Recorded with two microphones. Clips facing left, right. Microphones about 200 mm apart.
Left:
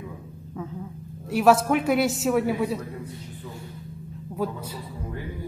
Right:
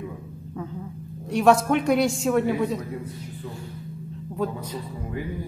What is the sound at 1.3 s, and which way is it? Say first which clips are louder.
A man's voice: even; 5° left (ahead or behind).